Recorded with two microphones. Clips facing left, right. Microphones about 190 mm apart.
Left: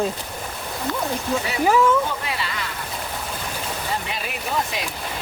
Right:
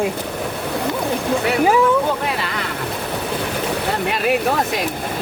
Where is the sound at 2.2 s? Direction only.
60° right (ahead or behind).